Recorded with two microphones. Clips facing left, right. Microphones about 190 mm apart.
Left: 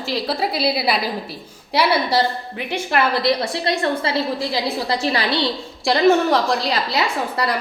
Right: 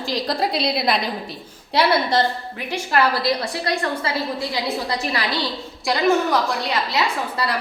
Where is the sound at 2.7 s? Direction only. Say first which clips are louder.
Even; 25° left (ahead or behind).